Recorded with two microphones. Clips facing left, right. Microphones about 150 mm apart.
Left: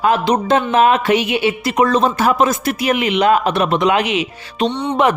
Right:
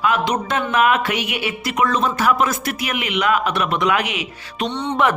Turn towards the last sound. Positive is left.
turn(degrees=15)  # may be behind; listen again after turning